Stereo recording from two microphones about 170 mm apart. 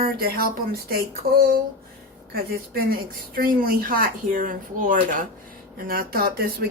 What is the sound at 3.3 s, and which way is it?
Speech, 60° right (ahead or behind).